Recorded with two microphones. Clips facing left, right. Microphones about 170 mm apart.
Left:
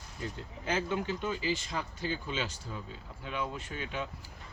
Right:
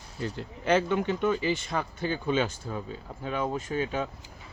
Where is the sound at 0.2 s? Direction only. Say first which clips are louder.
Right 6 dB; 75° right (ahead or behind); by 2.8 s 55° right (ahead or behind).